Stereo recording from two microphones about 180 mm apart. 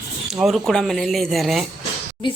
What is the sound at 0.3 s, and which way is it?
A woman's voice, 5° right (ahead or behind).